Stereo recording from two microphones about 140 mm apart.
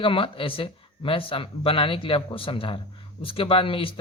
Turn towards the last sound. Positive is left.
turn(degrees=40)  # may be behind; listen again after turning